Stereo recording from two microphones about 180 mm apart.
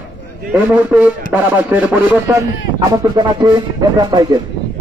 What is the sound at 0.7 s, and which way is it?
Speech, 10° right (ahead or behind).